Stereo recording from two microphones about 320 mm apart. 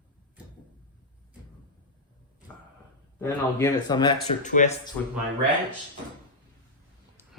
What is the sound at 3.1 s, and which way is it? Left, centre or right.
Speech, centre.